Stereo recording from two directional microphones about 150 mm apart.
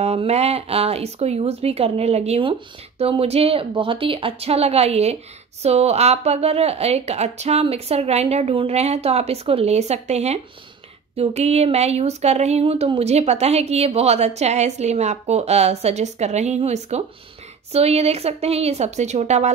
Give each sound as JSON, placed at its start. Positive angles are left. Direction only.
{"t": 0.0, "sound": "a woman's voice", "side_deg": -45}